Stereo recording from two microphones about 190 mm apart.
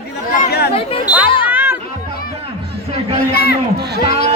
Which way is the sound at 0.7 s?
30° left (ahead or behind).